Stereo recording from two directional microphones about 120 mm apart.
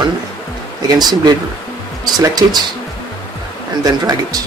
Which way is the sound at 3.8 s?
30° right (ahead or behind).